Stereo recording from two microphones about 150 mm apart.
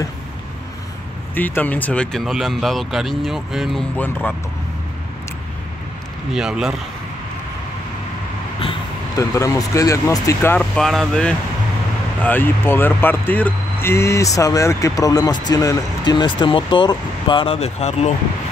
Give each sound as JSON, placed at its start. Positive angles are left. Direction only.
{"t": 1.3, "sound": "speech", "side_deg": 10}
{"t": 3.9, "sound": "speech", "side_deg": 10}
{"t": 6.3, "sound": "speech", "side_deg": -5}
{"t": 9.1, "sound": "speech", "side_deg": 20}
{"t": 10.6, "sound": "speech", "side_deg": 0}